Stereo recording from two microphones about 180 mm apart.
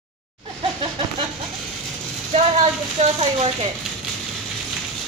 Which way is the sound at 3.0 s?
35° right (ahead or behind).